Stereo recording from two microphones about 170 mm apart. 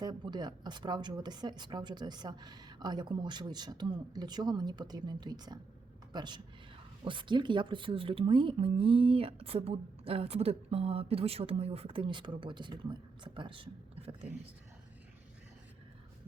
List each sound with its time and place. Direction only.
0.0 s a woman's voice: 25° right (ahead or behind)